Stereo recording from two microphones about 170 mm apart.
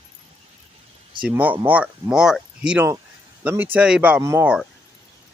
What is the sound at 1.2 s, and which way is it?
Speech, 10° right (ahead or behind).